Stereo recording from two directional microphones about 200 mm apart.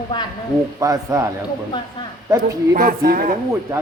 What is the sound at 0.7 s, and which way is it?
Speech, 15° right (ahead or behind).